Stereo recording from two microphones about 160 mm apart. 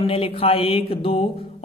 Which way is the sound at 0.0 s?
35° left (ahead or behind).